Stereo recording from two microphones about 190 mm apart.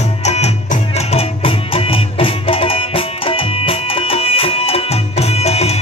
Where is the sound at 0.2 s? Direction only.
35° left (ahead or behind).